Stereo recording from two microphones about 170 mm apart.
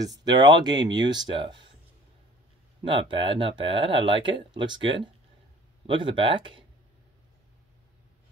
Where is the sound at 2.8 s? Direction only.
30° right (ahead or behind).